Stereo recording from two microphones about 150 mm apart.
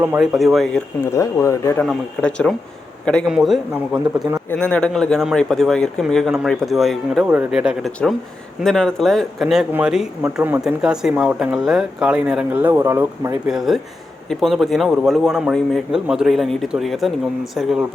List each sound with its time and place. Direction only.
0.2 s speech: centre (ahead or behind)
1.0 s speech: 20° left (ahead or behind)
1.8 s speech: 5° left (ahead or behind)
4.4 s speech: 10° left (ahead or behind); by 13.3 s 20° right (ahead or behind)
13.5 s speech: centre (ahead or behind)